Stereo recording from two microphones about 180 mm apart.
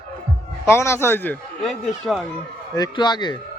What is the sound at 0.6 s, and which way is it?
A man's voice, 15° left (ahead or behind).